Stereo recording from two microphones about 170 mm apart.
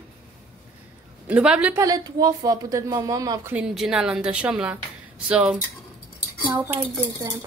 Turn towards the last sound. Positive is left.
turn(degrees=-15)  # may be behind; listen again after turning